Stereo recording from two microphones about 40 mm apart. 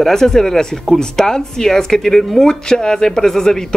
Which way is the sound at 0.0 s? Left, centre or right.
Centre.